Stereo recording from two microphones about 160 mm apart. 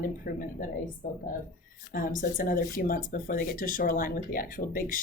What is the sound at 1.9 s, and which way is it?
Speech, 60° left (ahead or behind).